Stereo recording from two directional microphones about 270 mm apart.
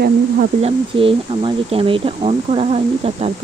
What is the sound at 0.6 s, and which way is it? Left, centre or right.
Speech, centre.